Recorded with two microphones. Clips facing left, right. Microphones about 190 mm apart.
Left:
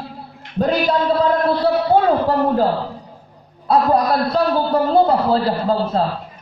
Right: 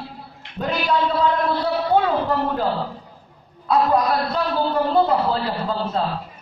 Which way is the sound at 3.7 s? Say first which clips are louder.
Left 3 dB; 35° left (ahead or behind).